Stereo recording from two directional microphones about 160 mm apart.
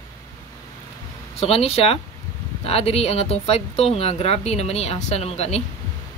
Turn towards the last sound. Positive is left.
turn(degrees=40)  # may be behind; listen again after turning